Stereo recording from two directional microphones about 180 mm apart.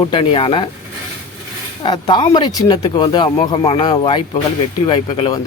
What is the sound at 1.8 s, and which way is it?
Speech, 25° left (ahead or behind).